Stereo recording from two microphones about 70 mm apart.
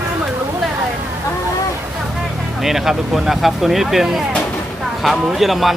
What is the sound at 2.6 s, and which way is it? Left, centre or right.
Speech, centre.